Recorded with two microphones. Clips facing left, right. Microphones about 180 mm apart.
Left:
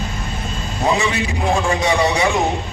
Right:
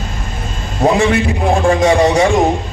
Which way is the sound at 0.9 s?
55° right (ahead or behind).